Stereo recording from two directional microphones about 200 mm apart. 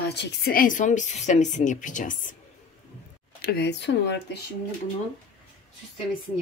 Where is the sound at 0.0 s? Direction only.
55° left (ahead or behind); by 2.3 s 40° left (ahead or behind).